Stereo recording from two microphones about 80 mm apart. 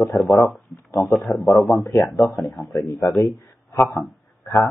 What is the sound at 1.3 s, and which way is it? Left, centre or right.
A man's voice, centre.